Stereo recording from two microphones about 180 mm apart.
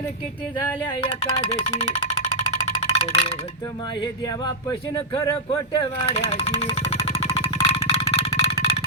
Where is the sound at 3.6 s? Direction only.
25° left (ahead or behind).